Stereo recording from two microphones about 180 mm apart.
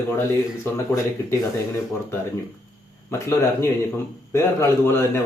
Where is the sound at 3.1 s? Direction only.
15° left (ahead or behind).